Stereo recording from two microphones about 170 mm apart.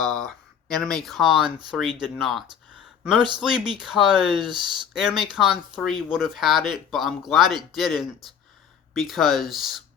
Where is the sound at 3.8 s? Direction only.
5° right (ahead or behind).